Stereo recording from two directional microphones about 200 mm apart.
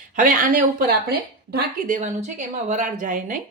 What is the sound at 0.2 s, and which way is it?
A woman's voice, 40° right (ahead or behind).